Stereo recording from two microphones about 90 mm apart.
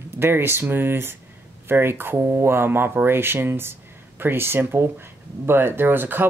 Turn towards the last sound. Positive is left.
turn(degrees=-25)  # may be behind; listen again after turning